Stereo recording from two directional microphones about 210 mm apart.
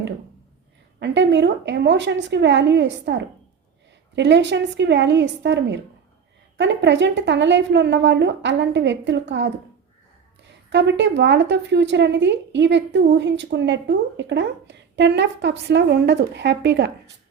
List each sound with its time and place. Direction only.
0.9 s a woman's voice: 55° right (ahead or behind)
10.7 s a woman's voice: 55° right (ahead or behind)